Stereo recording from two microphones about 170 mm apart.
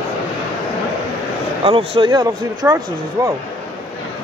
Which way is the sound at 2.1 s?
20° right (ahead or behind).